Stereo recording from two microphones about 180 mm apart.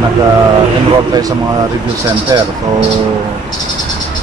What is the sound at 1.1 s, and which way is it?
Speech, 20° right (ahead or behind).